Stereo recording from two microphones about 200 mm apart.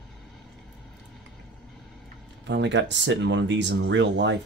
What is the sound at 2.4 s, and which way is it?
Speech, 60° right (ahead or behind).